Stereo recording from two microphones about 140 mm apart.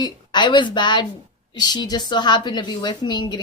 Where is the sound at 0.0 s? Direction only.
30° left (ahead or behind).